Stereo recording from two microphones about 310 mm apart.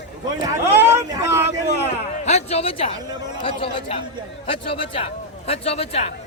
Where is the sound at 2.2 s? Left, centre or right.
Left.